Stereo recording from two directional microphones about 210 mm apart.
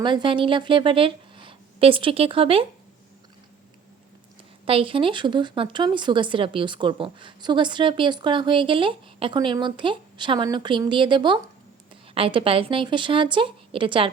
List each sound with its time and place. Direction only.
0.0 s a woman's voice: 20° right (ahead or behind)
4.6 s speech: 25° right (ahead or behind)